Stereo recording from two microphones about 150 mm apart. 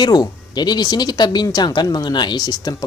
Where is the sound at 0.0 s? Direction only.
25° left (ahead or behind).